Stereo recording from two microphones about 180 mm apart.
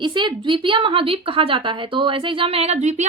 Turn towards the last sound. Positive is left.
turn(degrees=-40)  # may be behind; listen again after turning